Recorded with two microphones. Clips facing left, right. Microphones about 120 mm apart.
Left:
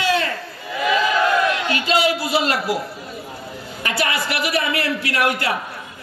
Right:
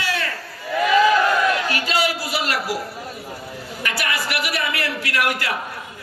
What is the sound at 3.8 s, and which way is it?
A woman's voice, 25° left (ahead or behind).